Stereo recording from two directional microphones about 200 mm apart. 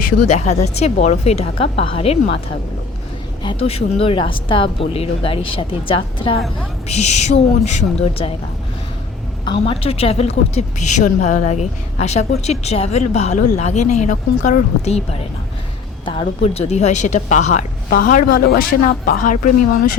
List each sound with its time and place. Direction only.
0.3 s a woman's voice: 35° left (ahead or behind)
3.4 s a woman's voice: 30° left (ahead or behind)
9.5 s a woman's voice: 30° left (ahead or behind)
16.0 s a woman's voice: 30° left (ahead or behind); by 19.4 s 45° left (ahead or behind)